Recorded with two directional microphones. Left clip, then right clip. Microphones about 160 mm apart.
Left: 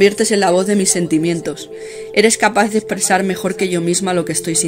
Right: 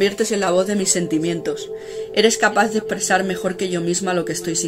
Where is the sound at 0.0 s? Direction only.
55° left (ahead or behind).